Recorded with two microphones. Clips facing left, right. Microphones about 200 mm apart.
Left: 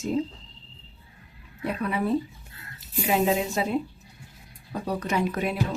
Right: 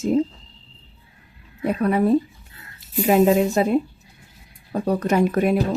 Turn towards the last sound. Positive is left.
turn(degrees=-50)  # may be behind; listen again after turning